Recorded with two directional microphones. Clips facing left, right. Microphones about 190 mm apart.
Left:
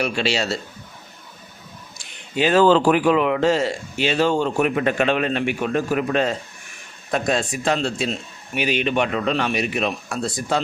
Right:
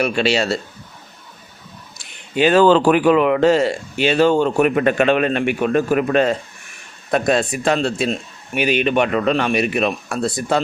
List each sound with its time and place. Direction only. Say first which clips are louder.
0.0 s speech: right 4 dB; 60° right (ahead or behind)
2.3 s speech: right 3 dB; 60° right (ahead or behind)